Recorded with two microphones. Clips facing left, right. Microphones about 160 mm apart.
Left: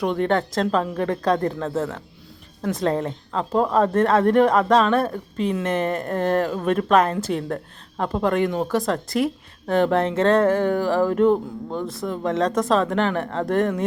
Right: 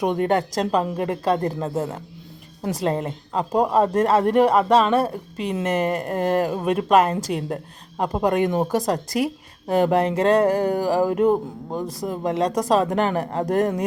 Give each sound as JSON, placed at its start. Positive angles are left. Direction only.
{"t": 0.0, "sound": "a woman's voice", "side_deg": -15}
{"t": 9.6, "sound": "a woman's voice", "side_deg": -10}
{"t": 11.7, "sound": "speech", "side_deg": -40}
{"t": 12.0, "sound": "a woman's voice", "side_deg": -15}